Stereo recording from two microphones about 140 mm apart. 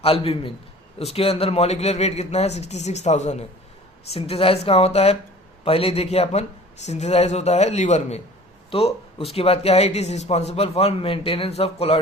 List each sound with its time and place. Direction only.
0.0 s a man's voice: 45° left (ahead or behind)